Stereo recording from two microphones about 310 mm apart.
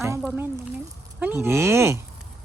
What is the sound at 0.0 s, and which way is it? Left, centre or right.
Speech, centre.